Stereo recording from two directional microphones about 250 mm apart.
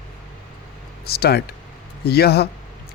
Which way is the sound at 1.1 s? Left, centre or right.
Left.